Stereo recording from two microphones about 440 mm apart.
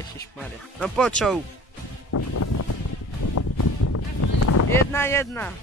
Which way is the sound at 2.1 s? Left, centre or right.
Left.